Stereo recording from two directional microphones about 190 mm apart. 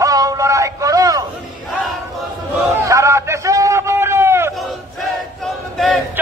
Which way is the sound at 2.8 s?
15° right (ahead or behind).